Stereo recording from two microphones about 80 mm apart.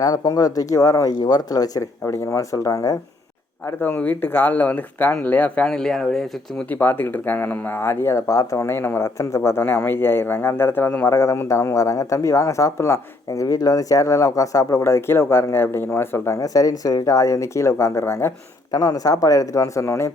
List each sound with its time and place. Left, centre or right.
0.0 s speech: left
1.1 s speech: left
2.1 s speech: left
3.8 s speech: left; by 6.2 s centre
6.7 s speech: left
13.4 s speech: left
16.4 s speech: left
18.7 s speech: left